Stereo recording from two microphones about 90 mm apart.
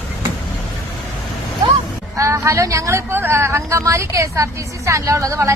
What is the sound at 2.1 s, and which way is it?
Speech, 35° right (ahead or behind).